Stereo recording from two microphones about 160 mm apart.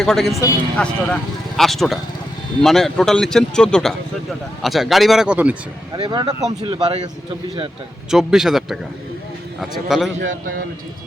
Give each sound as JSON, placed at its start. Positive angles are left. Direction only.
{"t": 0.0, "sound": "a man's voice", "side_deg": 0}
{"t": 5.9, "sound": "speech", "side_deg": -25}
{"t": 8.1, "sound": "a man's voice", "side_deg": 0}
{"t": 10.2, "sound": "speech", "side_deg": -60}